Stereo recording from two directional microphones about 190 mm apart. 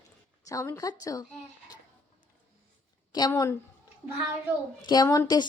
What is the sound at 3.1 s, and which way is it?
Speech, 20° left (ahead or behind).